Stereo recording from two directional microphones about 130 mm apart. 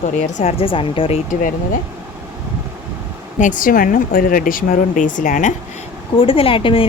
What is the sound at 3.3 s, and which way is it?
Speech, 80° left.